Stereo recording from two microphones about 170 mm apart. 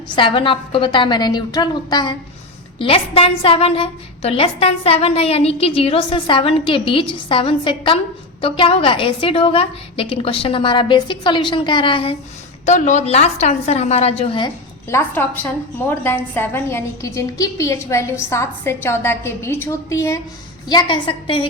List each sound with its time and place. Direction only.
0.2 s a woman's voice: 30° left (ahead or behind)
12.6 s a woman's voice: 45° left (ahead or behind)
14.8 s a woman's voice: 15° left (ahead or behind); by 21.4 s 30° left (ahead or behind)